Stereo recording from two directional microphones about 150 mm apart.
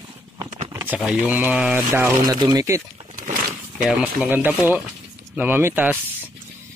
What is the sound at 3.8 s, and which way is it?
Speech, 5° right (ahead or behind).